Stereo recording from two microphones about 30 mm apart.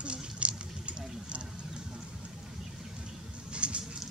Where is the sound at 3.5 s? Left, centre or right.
Right.